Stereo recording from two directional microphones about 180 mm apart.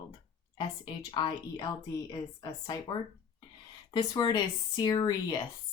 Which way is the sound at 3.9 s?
25° left (ahead or behind).